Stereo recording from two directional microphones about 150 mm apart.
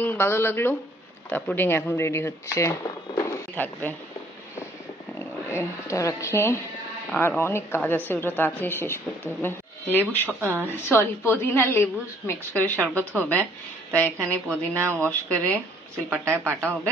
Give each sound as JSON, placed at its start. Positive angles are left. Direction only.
{"t": 0.0, "sound": "a woman's voice", "side_deg": 15}
{"t": 5.2, "sound": "a woman's voice", "side_deg": 15}
{"t": 10.4, "sound": "a woman's voice", "side_deg": -10}
{"t": 10.9, "sound": "a woman's voice", "side_deg": 15}
{"t": 16.1, "sound": "a woman's voice", "side_deg": -15}